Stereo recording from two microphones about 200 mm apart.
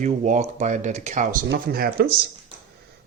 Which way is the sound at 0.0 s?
35° right (ahead or behind).